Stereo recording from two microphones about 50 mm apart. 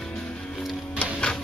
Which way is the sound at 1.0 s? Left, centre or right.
Left.